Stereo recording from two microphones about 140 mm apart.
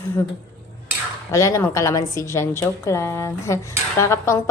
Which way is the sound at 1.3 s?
20° left (ahead or behind).